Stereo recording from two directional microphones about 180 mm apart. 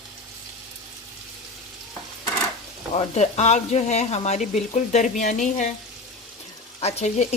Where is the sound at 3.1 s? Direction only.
40° left (ahead or behind).